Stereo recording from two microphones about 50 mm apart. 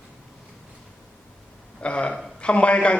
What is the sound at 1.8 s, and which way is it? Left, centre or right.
A man's voice, left.